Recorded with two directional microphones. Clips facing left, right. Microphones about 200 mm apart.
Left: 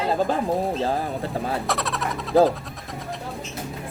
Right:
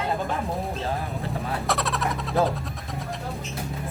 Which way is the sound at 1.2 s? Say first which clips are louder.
Left 3 dB; centre (ahead or behind).